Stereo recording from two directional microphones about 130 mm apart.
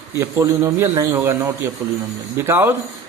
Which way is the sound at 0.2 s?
20° right (ahead or behind).